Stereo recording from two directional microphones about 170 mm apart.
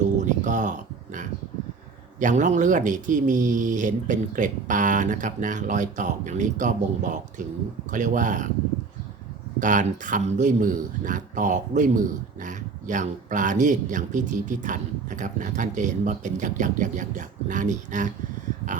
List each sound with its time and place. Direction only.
0.0 s a sound: 45° right (ahead or behind)
2.1 s speech: 50° right (ahead or behind)
9.6 s speech: 50° right (ahead or behind)